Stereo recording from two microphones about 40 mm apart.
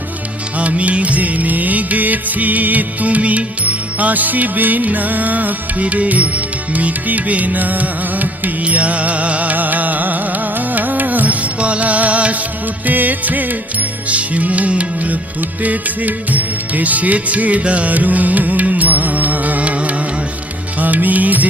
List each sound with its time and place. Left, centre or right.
0.6 s music: right
8.6 s music: right
14.1 s music: right